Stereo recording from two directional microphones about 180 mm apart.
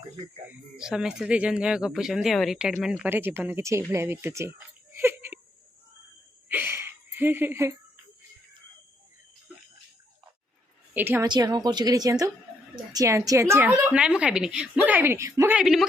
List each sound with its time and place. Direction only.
0.4 s speech: 5° right (ahead or behind)
6.5 s a sound: 10° right (ahead or behind)
10.9 s speech: 10° right (ahead or behind)
11.3 s speech: 20° right (ahead or behind)
13.7 s speech: 5° right (ahead or behind)
15.5 s a woman's voice: centre (ahead or behind)